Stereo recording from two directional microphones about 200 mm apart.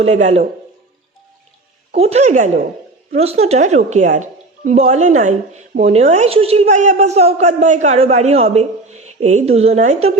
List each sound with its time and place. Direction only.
0.0 s a woman's voice: 35° right (ahead or behind)
2.0 s a woman's voice: 30° right (ahead or behind)